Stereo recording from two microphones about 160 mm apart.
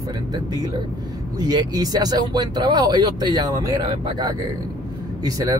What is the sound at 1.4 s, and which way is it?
Speech, 25° right (ahead or behind).